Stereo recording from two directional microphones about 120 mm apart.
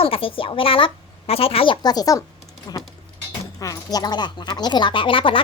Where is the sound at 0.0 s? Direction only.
50° left (ahead or behind).